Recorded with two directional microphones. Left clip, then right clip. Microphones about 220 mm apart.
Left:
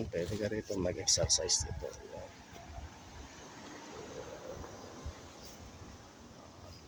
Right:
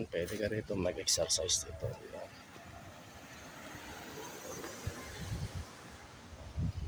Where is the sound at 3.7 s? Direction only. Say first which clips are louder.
Left 1 dB; 50° right (ahead or behind).